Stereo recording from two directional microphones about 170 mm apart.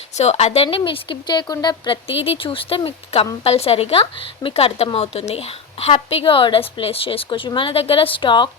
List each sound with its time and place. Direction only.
0.2 s a woman's voice: 40° left (ahead or behind)